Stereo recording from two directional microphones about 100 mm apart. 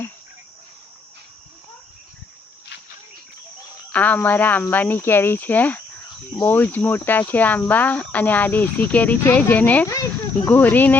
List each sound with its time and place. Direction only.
3.9 s speech: 15° left (ahead or behind)
9.8 s speech: 30° left (ahead or behind)
10.5 s speech: 15° left (ahead or behind)